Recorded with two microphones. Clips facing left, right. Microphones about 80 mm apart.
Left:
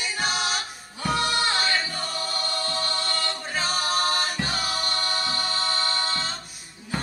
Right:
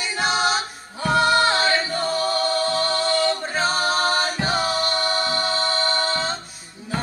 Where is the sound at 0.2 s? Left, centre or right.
Right.